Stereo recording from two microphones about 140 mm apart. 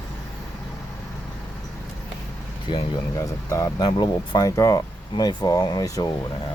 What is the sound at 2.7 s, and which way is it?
Speech, 35° left (ahead or behind).